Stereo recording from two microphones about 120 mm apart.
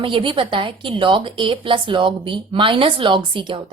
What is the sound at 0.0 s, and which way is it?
A woman's voice, 45° right (ahead or behind).